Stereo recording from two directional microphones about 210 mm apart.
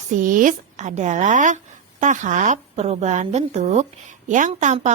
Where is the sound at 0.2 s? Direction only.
40° right (ahead or behind).